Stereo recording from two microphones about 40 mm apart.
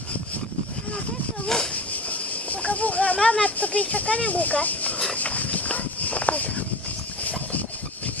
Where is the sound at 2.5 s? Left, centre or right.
Left.